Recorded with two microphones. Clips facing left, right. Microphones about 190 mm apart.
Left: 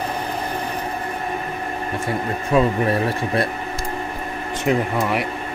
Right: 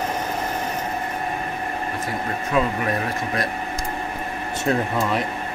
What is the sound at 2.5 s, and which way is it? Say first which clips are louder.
Speech: left 5 dB; 30° left (ahead or behind).